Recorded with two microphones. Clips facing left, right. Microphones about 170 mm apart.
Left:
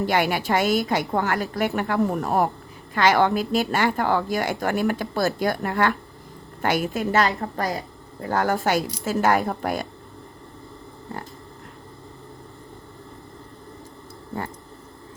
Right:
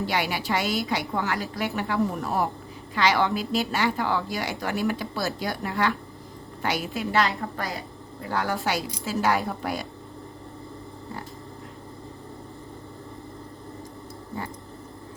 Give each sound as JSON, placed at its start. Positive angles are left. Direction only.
{"t": 0.0, "sound": "a woman's voice", "side_deg": 50}